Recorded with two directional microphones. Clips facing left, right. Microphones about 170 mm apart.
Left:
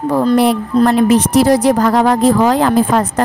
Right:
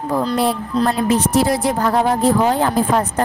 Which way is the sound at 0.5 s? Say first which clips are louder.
Left 6 dB; 75° left (ahead or behind).